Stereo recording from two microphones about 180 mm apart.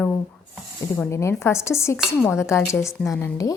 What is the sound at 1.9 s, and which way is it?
Dishes, 5° right (ahead or behind).